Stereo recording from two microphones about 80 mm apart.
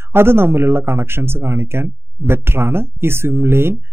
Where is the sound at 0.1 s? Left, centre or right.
Right.